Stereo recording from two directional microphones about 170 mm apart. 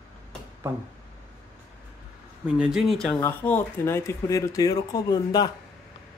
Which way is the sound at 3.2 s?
15° left (ahead or behind).